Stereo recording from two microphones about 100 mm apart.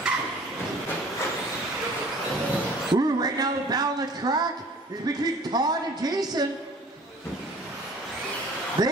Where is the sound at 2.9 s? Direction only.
40° right (ahead or behind).